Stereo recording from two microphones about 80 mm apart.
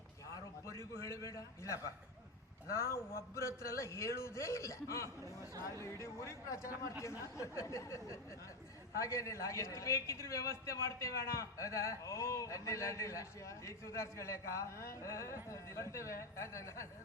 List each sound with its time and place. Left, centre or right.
0.7 s a man's voice: left
5.0 s speech: right
5.8 s a man's voice: left